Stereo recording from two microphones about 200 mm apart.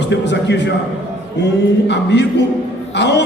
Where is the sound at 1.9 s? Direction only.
60° left (ahead or behind).